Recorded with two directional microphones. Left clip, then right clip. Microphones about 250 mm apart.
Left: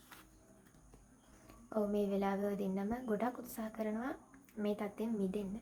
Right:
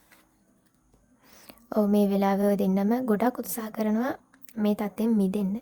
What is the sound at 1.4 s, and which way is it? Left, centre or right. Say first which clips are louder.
A woman's voice: right 11 dB; right.